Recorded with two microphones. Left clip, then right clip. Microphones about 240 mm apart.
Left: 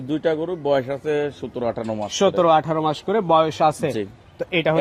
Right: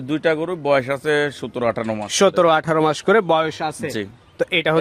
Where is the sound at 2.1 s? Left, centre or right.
Right.